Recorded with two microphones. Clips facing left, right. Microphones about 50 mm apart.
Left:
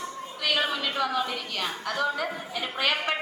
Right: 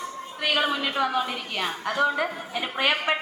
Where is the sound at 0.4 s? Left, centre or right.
Centre.